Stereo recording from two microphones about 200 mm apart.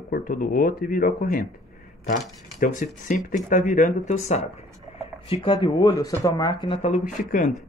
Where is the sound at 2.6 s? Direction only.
40° left (ahead or behind).